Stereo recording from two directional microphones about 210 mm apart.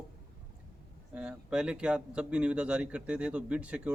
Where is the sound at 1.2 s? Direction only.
5° right (ahead or behind).